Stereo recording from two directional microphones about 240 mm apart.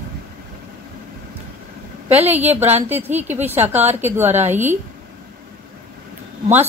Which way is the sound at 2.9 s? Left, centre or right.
Centre.